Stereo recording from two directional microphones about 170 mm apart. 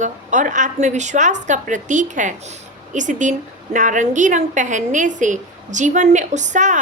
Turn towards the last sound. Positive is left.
turn(degrees=-45)  # may be behind; listen again after turning